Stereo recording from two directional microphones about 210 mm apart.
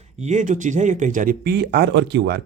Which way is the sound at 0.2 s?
35° right (ahead or behind).